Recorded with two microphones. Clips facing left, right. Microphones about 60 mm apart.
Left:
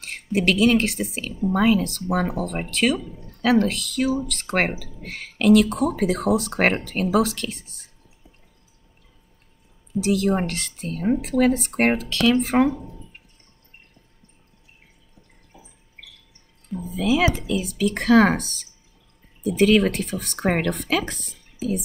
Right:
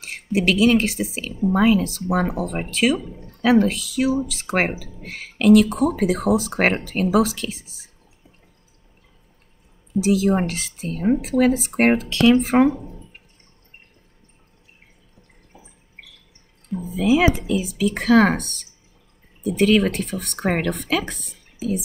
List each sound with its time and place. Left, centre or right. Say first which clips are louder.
0.0 s speech: right 1 dB; centre
9.9 s speech: right 2 dB; centre
12.1 s speech: right 4 dB; centre
12.4 s speech: right 3 dB; centre
16.7 s speech: right 3 dB; centre
17.5 s speech: right 2 dB; centre